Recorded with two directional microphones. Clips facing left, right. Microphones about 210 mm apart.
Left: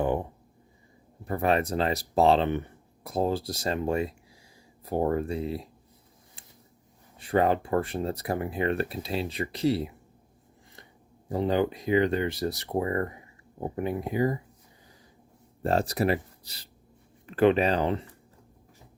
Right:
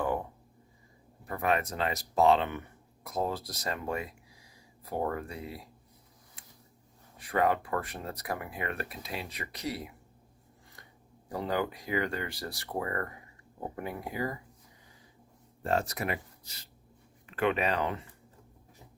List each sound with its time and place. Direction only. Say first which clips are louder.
1.2 s speech: left 5 dB; 30° left (ahead or behind)
7.2 s speech: left 4 dB; 30° left (ahead or behind)
11.3 s speech: left 6 dB; 25° left (ahead or behind)
15.6 s speech: left 6 dB; 35° left (ahead or behind)